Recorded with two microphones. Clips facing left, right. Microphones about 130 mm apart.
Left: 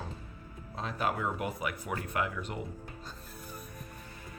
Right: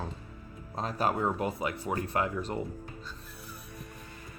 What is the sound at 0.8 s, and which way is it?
Speech, 40° right (ahead or behind).